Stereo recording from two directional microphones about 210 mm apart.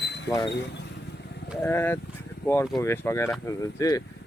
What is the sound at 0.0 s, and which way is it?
Vehicle, 55° left (ahead or behind).